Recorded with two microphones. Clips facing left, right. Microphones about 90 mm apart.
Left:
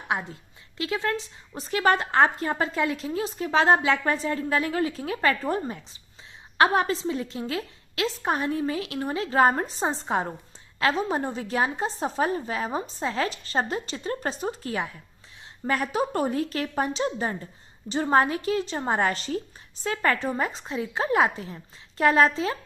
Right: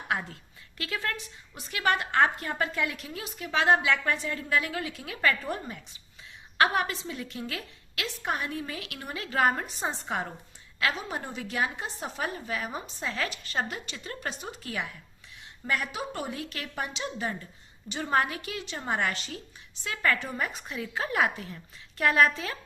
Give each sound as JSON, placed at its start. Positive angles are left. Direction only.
{"t": 0.1, "sound": "a woman's voice", "side_deg": 20}